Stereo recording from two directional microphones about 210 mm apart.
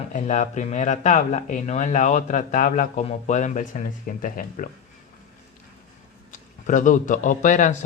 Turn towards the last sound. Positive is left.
turn(degrees=35)  # may be behind; listen again after turning